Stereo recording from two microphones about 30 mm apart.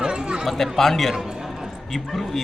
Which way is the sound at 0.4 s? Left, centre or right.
Centre.